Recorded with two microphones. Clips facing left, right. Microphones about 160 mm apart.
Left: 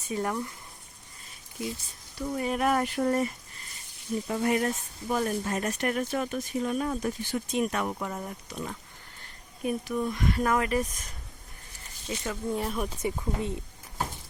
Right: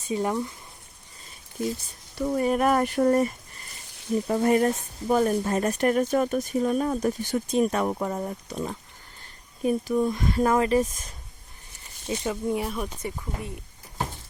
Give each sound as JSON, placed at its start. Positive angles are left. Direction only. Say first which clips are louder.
{"t": 0.1, "sound": "speech", "louder": "right 4 dB", "side_deg": -20}
{"t": 2.1, "sound": "speech", "louder": "right 6 dB", "side_deg": -45}
{"t": 4.3, "sound": "speech", "louder": "right 5 dB", "side_deg": -40}
{"t": 12.0, "sound": "speech", "louder": "right 5 dB", "side_deg": -20}
{"t": 12.5, "sound": "speech", "louder": "right 1 dB", "side_deg": 0}
{"t": 13.0, "sound": "speech", "louder": "left 3 dB", "side_deg": 15}